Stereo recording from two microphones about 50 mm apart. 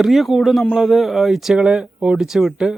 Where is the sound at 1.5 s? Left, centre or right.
Centre.